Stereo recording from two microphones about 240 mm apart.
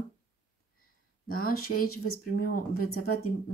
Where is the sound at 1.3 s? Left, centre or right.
Left.